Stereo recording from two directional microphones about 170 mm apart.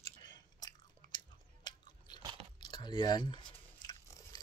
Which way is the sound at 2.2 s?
25° right (ahead or behind).